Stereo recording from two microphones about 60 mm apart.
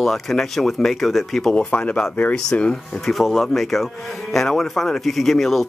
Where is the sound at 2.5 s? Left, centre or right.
Left.